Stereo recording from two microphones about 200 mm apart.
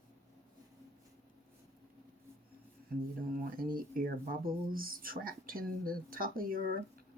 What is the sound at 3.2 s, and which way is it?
Speech, 45° right (ahead or behind).